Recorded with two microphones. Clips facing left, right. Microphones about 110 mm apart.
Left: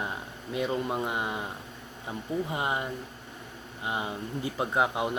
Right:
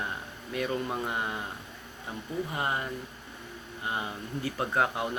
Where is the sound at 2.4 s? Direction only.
20° left (ahead or behind).